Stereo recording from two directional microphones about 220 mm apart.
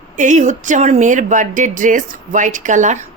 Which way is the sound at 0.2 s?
35° right (ahead or behind).